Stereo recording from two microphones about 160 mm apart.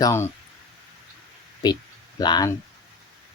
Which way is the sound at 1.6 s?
25° left (ahead or behind).